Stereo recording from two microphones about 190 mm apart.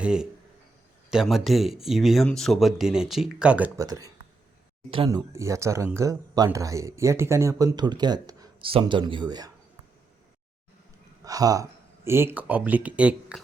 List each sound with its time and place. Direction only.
0.0 s speech: 5° right (ahead or behind)
3.8 s speech: 20° right (ahead or behind)
5.3 s speech: 15° right (ahead or behind)
11.2 s speech: 20° right (ahead or behind)